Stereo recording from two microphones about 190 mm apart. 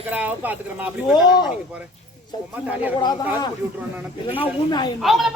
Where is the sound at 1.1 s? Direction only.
20° left (ahead or behind).